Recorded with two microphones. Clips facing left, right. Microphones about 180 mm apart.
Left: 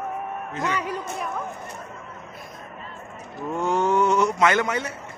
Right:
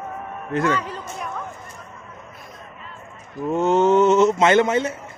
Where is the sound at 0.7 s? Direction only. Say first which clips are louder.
Left 1 dB; 10° left (ahead or behind).